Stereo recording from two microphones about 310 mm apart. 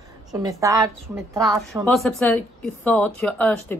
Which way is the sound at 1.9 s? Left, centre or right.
Centre.